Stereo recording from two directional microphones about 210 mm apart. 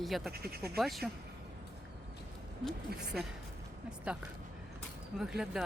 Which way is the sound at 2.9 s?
50° right (ahead or behind).